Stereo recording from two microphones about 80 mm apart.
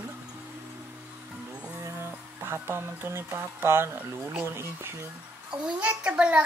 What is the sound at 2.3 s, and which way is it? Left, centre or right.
Speech, right.